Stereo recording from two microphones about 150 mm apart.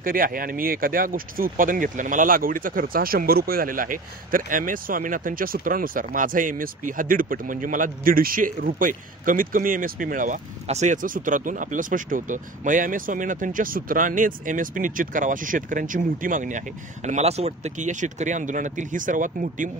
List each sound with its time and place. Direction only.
0.0 s speech: 70° right (ahead or behind)